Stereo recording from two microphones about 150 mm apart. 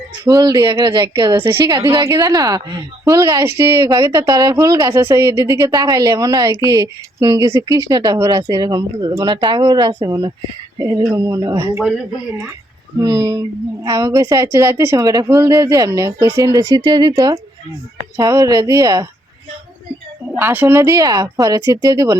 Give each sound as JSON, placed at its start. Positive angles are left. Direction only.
{"t": 0.3, "sound": "speech", "side_deg": -20}
{"t": 1.4, "sound": "a woman's voice", "side_deg": -15}
{"t": 2.1, "sound": "speech", "side_deg": -30}
{"t": 4.3, "sound": "speech", "side_deg": -30}
{"t": 10.8, "sound": "a sound", "side_deg": -25}
{"t": 11.1, "sound": "speech", "side_deg": -20}
{"t": 13.0, "sound": "speech", "side_deg": -20}
{"t": 20.3, "sound": "speech", "side_deg": -10}